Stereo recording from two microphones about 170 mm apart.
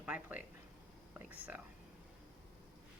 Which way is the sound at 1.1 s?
10° right (ahead or behind).